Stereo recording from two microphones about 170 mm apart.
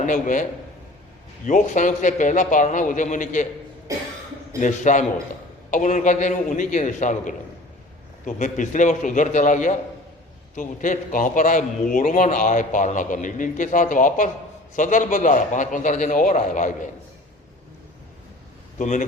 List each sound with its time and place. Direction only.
0.0 s a man's voice: 50° left (ahead or behind)
1.5 s a man's voice: 50° left (ahead or behind)
4.6 s a man's voice: 45° left (ahead or behind)
18.8 s a man's voice: 50° left (ahead or behind)